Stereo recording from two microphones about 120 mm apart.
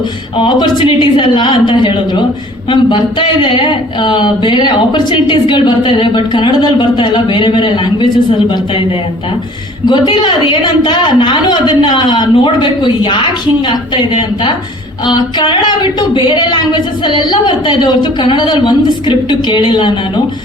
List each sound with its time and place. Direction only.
0.3 s speech: 40° left (ahead or behind)
9.8 s speech: 40° left (ahead or behind)